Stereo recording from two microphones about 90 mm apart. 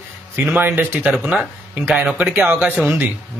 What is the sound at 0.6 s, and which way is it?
Speech, 20° right (ahead or behind).